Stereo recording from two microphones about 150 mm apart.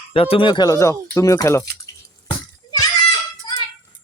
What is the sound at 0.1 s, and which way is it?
Speech, 35° left (ahead or behind).